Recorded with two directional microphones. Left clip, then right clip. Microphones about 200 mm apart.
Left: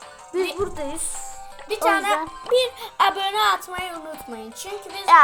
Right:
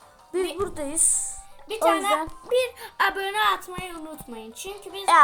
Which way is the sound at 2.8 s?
15° left (ahead or behind).